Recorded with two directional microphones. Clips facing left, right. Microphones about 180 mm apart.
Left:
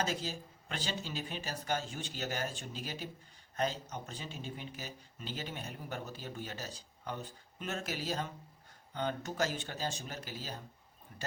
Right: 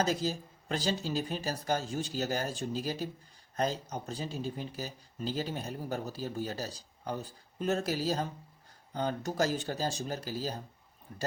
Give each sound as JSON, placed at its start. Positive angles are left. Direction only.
{"t": 0.0, "sound": "speech", "side_deg": -40}